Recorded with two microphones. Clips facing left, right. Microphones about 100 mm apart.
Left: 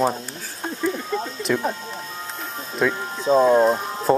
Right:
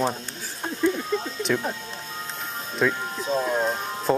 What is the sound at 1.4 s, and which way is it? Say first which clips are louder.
Speech: left 4 dB; 5° left (ahead or behind).